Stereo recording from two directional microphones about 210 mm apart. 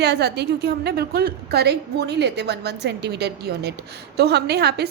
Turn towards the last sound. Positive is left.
turn(degrees=-50)  # may be behind; listen again after turning